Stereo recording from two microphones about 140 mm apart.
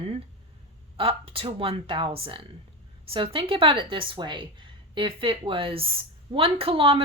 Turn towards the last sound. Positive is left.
turn(degrees=-40)  # may be behind; listen again after turning